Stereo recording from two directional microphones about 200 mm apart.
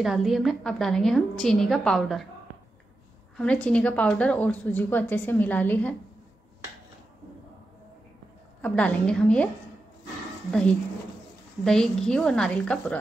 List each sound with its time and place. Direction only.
0.0 s a woman's voice: centre (ahead or behind)
3.3 s a woman's voice: 5° left (ahead or behind)
8.5 s a woman's voice: 5° left (ahead or behind)
11.6 s a woman's voice: 5° left (ahead or behind)